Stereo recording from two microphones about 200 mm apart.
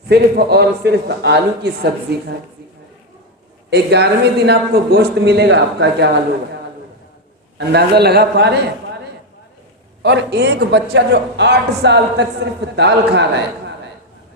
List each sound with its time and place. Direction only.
0.1 s a man's voice: 55° right (ahead or behind)
3.7 s a man's voice: 55° right (ahead or behind)
7.7 s a man's voice: 55° right (ahead or behind)
10.0 s a man's voice: 55° right (ahead or behind)